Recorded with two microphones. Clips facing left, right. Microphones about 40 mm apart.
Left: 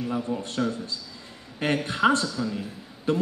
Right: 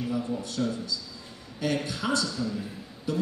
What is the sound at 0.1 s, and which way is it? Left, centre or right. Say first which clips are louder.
Speech: left 2 dB; left.